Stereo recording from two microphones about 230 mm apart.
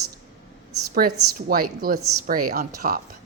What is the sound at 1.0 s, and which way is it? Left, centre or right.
A woman's voice, right.